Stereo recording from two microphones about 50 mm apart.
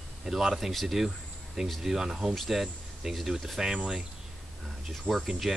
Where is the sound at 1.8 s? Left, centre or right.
Centre.